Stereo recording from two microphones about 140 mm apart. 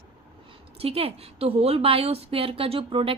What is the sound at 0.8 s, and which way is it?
A woman's voice, 45° right (ahead or behind).